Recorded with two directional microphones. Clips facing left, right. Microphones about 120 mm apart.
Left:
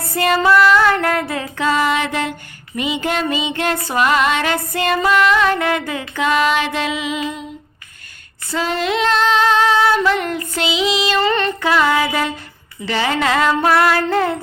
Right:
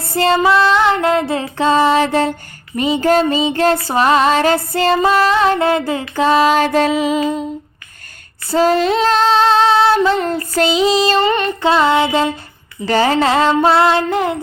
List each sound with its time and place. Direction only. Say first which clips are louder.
0.0 s female singing: right 3 dB; 30° right (ahead or behind)
2.7 s music: right 7 dB; 40° right (ahead or behind)
8.4 s music: right 7 dB; 40° right (ahead or behind)
11.2 s female singing: right 2 dB; 15° right (ahead or behind)
12.8 s female singing: right 5 dB; 40° right (ahead or behind); by 14.3 s 20° right (ahead or behind)